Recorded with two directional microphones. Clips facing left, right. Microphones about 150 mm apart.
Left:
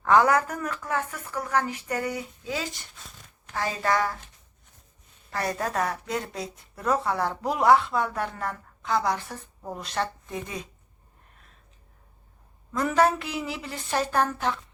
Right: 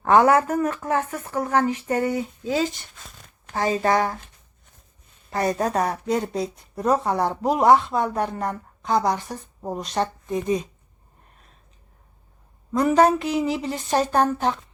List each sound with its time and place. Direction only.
0.1 s a woman's voice: 25° right (ahead or behind)
5.3 s a woman's voice: 20° right (ahead or behind)
9.6 s speech: 35° right (ahead or behind)
9.8 s speech: 20° right (ahead or behind)
12.7 s a woman's voice: 20° right (ahead or behind)
13.2 s a woman's voice: 35° right (ahead or behind)